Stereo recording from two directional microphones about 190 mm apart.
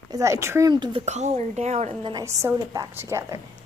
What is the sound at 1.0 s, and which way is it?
Speech, 35° right (ahead or behind).